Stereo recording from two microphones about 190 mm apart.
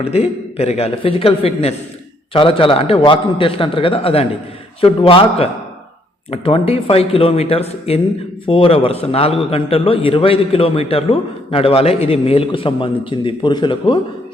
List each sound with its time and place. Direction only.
0.0 s a man's voice: 30° left (ahead or behind)